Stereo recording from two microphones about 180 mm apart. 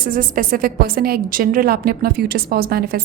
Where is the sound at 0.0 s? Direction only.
50° right (ahead or behind).